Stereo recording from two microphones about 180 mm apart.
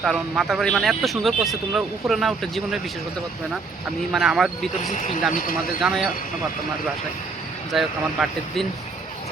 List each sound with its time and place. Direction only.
0.0 s speech: centre (ahead or behind)
4.1 s speech: centre (ahead or behind)
4.9 s speech: 45° left (ahead or behind)
5.8 s speech: centre (ahead or behind)
7.7 s speech: centre (ahead or behind)